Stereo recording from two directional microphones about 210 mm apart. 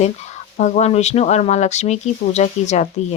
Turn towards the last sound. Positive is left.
turn(degrees=35)  # may be behind; listen again after turning